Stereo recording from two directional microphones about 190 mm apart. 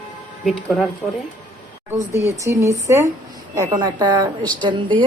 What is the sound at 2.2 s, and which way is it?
A woman's voice, 15° right (ahead or behind).